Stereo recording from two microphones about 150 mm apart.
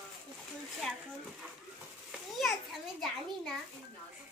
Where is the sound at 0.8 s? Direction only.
5° left (ahead or behind).